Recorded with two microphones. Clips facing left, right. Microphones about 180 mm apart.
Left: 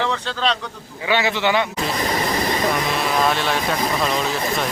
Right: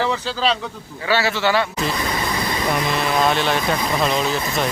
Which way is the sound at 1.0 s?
15° left (ahead or behind).